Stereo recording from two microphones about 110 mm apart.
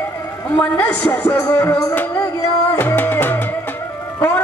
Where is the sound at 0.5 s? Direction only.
15° left (ahead or behind).